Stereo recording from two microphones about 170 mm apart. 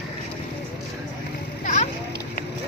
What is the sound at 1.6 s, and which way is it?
Splash, 45° left (ahead or behind).